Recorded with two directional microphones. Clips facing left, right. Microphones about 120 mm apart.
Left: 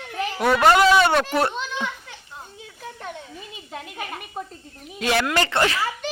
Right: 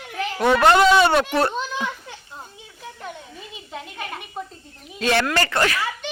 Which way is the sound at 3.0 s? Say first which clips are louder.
Even; centre (ahead or behind).